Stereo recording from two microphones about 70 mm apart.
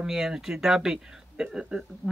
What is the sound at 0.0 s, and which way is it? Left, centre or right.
Speech, centre.